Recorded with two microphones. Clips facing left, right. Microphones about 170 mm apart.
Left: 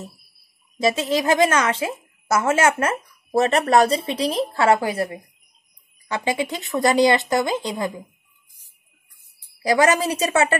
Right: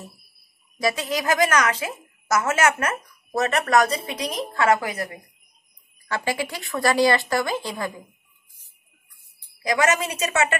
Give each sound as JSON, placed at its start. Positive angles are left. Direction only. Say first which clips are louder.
{"t": 0.7, "sound": "a woman's voice", "louder": "left 4 dB", "side_deg": 25}
{"t": 9.6, "sound": "a woman's voice", "louder": "left 4 dB", "side_deg": 35}